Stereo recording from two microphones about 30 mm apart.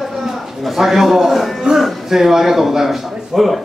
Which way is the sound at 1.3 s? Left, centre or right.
Centre.